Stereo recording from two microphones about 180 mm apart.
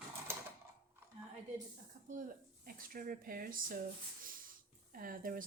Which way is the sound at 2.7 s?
50° right (ahead or behind).